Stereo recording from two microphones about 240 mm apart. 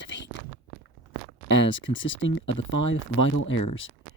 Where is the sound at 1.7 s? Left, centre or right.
Left.